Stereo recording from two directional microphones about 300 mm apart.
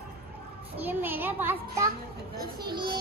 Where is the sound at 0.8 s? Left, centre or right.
Centre.